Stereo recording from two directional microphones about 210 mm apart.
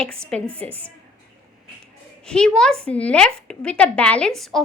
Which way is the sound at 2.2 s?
5° left (ahead or behind).